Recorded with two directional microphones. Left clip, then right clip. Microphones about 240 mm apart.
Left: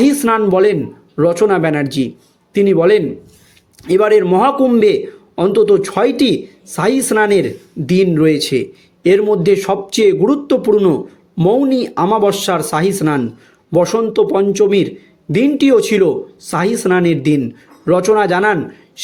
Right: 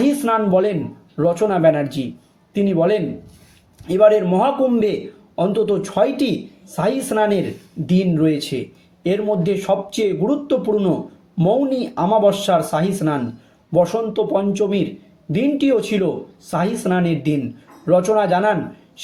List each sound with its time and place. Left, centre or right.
0.0 s speech: left